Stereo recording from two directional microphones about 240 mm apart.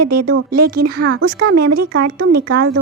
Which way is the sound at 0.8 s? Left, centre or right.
Right.